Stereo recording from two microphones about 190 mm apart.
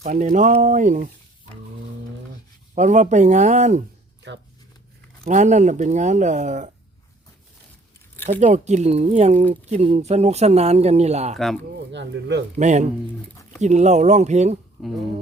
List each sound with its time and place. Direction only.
0.0 s speech: 45° right (ahead or behind)
2.7 s speech: 40° right (ahead or behind)
5.2 s speech: 40° right (ahead or behind)
8.3 s speech: 40° right (ahead or behind)
11.3 s speech: centre (ahead or behind)
11.9 s speech: 70° right (ahead or behind)
12.5 s speech: 40° right (ahead or behind)
14.8 s speech: centre (ahead or behind)